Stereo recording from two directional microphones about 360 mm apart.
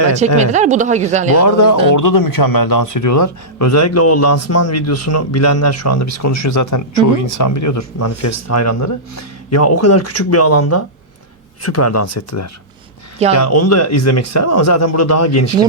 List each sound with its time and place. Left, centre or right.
0.3 s speech: centre
1.4 s a man's voice: left